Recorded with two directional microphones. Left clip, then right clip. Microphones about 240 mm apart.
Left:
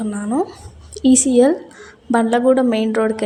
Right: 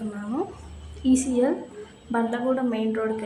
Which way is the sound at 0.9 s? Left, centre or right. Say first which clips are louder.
Left 8 dB; left.